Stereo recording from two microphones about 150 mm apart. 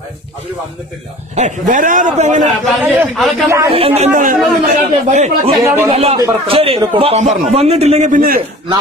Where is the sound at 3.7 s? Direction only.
40° right (ahead or behind).